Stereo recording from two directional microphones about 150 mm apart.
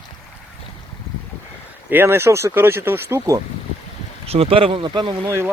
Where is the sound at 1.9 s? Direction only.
15° right (ahead or behind).